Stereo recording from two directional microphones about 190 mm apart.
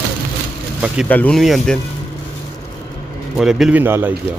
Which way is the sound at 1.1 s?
5° left (ahead or behind).